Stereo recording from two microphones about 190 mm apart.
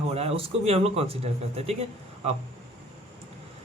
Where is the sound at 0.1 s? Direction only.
35° right (ahead or behind).